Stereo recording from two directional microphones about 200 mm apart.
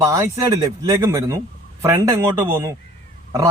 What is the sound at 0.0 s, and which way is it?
Speech, 15° right (ahead or behind).